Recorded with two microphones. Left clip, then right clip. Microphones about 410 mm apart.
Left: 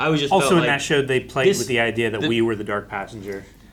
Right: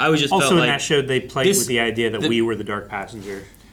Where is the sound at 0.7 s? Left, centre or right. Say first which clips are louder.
Even; centre.